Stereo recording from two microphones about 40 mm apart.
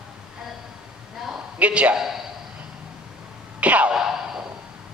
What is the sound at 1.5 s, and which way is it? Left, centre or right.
Speech, right.